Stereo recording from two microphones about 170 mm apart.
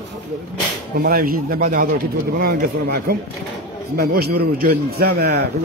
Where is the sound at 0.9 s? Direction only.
60° right (ahead or behind).